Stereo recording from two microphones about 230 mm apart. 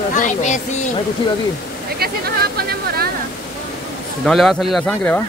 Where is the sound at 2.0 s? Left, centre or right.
Right.